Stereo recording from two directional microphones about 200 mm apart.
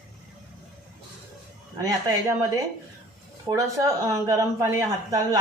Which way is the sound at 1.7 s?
15° right (ahead or behind).